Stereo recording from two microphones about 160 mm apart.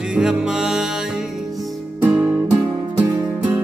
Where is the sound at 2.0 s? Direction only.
10° right (ahead or behind).